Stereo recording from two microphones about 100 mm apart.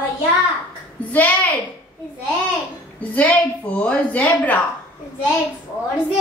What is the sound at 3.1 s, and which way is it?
A woman's voice, 15° left (ahead or behind).